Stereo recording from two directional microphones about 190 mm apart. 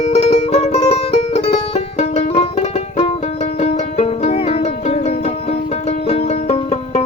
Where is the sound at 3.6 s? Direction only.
35° left (ahead or behind).